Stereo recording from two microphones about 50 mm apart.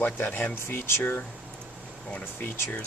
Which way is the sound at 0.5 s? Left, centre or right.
Left.